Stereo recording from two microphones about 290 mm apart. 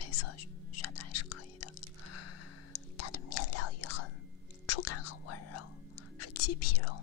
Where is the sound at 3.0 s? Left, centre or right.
Left.